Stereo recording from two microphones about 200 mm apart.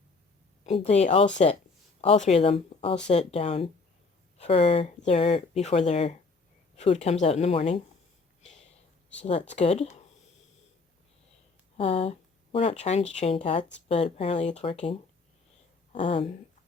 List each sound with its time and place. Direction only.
0.6 s speech: 30° left (ahead or behind)
9.6 s speech: 30° left (ahead or behind)
11.8 s speech: 30° left (ahead or behind)
16.0 s speech: 25° left (ahead or behind)